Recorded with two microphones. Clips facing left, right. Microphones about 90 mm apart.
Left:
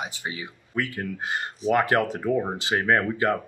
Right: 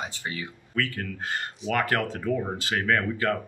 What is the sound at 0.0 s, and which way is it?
Speech, 15° left (ahead or behind).